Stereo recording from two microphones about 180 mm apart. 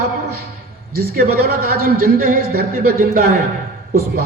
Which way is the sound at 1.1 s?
55° right (ahead or behind).